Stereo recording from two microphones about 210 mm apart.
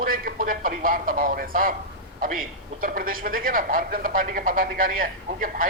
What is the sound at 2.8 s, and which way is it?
Speech, 40° right (ahead or behind).